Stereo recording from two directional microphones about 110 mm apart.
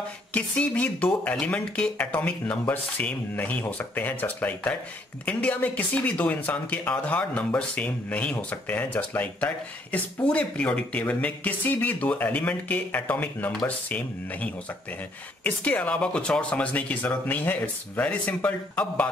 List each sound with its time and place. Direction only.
0.3 s speech: 15° left (ahead or behind)